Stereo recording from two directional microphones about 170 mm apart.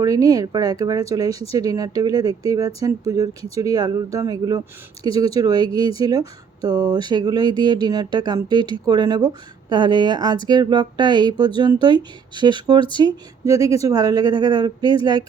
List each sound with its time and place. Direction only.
0.0 s speech: 20° right (ahead or behind)